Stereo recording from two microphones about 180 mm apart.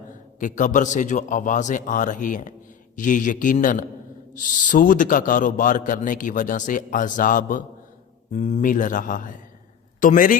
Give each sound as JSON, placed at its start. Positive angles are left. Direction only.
{"t": 0.3, "sound": "a man's voice", "side_deg": 45}